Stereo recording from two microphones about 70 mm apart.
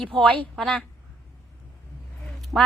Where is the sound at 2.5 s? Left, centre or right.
Centre.